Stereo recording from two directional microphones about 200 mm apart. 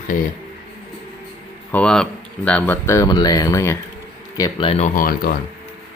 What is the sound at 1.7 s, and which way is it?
Speech, 5° left (ahead or behind).